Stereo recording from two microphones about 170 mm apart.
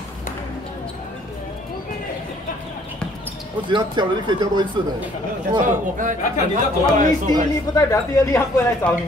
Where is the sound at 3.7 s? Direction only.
25° right (ahead or behind).